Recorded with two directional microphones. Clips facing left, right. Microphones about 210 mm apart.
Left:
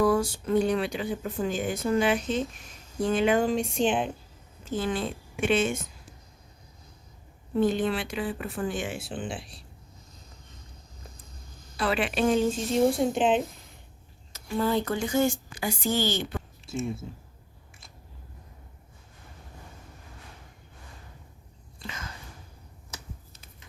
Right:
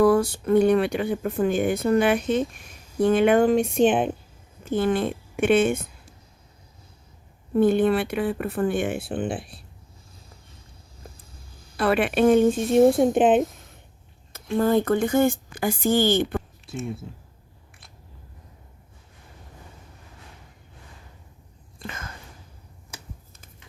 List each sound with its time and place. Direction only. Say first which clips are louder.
0.0 s speech: right 5 dB; 60° right (ahead or behind)
7.5 s speech: right 6 dB; 55° right (ahead or behind)
11.8 s speech: right 6 dB; 60° right (ahead or behind)
14.5 s speech: right 6 dB; 50° right (ahead or behind)
16.6 s speech: even; centre (ahead or behind)
21.8 s a sound: right 3 dB; 55° right (ahead or behind)